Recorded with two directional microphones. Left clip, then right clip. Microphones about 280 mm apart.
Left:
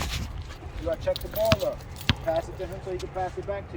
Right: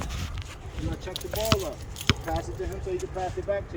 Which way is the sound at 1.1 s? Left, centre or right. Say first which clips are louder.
Left 4 dB; right.